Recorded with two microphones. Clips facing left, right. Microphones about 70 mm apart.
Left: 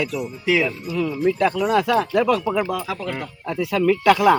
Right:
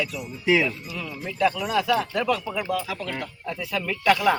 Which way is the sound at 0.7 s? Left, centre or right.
Left.